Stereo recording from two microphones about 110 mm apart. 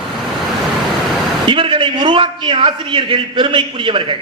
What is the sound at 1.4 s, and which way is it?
A man's voice, 55° right (ahead or behind).